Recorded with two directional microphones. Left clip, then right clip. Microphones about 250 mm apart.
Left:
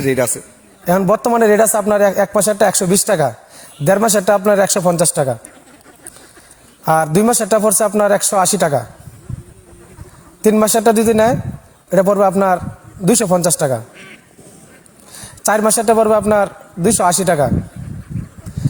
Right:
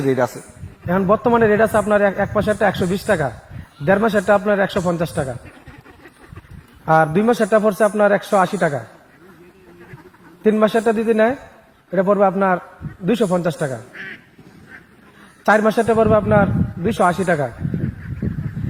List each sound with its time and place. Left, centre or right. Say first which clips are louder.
0.0 s a man's voice: left 2 dB; left
6.8 s a man's voice: left 1 dB; left
10.4 s a man's voice: left 4 dB; left
13.9 s a man's voice: right 5 dB; centre
15.4 s a man's voice: left 2 dB; left